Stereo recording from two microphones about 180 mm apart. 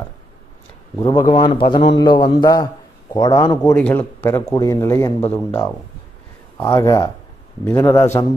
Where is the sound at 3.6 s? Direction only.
5° left (ahead or behind).